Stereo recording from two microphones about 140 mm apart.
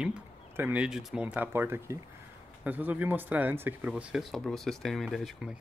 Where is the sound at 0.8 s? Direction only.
5° right (ahead or behind).